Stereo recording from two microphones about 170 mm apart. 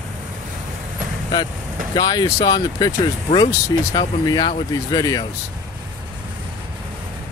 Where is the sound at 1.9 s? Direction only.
25° left (ahead or behind).